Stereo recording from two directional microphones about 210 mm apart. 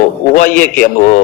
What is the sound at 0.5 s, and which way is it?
Speech, 10° left (ahead or behind).